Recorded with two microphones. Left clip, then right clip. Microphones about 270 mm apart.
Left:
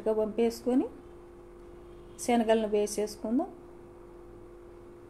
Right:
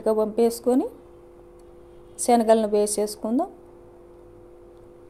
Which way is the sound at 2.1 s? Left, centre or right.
Right.